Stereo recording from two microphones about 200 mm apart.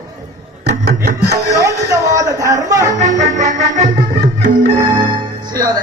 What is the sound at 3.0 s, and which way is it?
Music, 35° right (ahead or behind).